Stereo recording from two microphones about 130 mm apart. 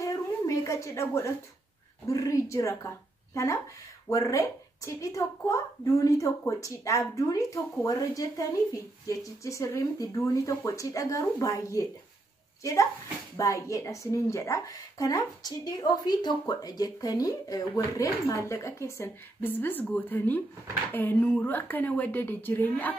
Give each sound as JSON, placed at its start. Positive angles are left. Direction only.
{"t": 0.0, "sound": "a sound", "side_deg": 25}
{"t": 2.0, "sound": "a woman's voice", "side_deg": 25}
{"t": 4.1, "sound": "a woman's voice", "side_deg": 25}
{"t": 13.4, "sound": "a woman's voice", "side_deg": 25}